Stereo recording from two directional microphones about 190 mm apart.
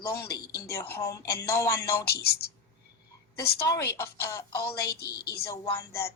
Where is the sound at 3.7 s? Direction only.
15° left (ahead or behind).